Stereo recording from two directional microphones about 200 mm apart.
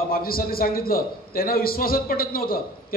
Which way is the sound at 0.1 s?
45° left (ahead or behind).